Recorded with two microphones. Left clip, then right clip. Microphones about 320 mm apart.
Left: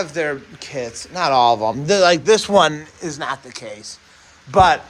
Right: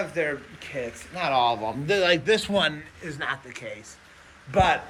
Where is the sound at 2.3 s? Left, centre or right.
Left.